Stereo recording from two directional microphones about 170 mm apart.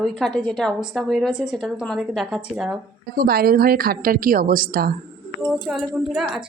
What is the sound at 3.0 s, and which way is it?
A woman's voice, 60° right (ahead or behind).